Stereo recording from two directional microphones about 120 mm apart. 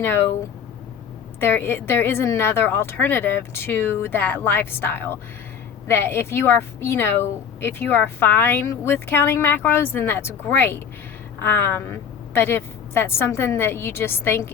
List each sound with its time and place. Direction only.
0.0 s speech: 20° left (ahead or behind)
1.4 s speech: 20° left (ahead or behind)